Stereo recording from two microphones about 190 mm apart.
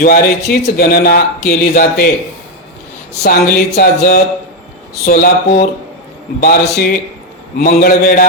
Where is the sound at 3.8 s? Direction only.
50° left (ahead or behind).